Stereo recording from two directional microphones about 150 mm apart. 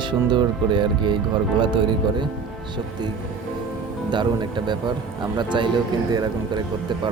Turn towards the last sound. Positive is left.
turn(degrees=-30)  # may be behind; listen again after turning